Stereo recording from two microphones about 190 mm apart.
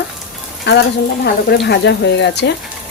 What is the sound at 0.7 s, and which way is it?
Speech, 65° left (ahead or behind).